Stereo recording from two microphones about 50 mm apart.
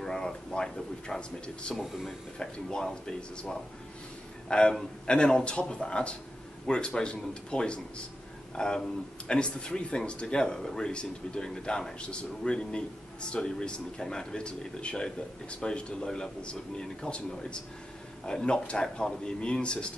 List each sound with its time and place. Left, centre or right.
0.0 s speech: centre
1.8 s speech: centre
2.3 s speech: centre